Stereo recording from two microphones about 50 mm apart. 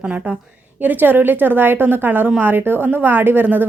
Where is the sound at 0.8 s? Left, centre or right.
Right.